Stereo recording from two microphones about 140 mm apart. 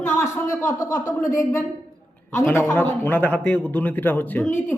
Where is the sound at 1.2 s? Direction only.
70° left (ahead or behind).